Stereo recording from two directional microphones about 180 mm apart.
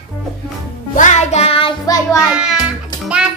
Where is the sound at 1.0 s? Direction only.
40° left (ahead or behind).